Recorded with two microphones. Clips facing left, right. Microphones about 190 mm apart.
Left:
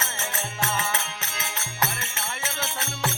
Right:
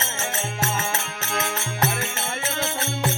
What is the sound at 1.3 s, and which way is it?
Music, 55° right (ahead or behind).